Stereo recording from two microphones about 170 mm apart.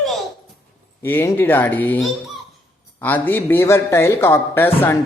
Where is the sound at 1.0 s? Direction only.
10° left (ahead or behind).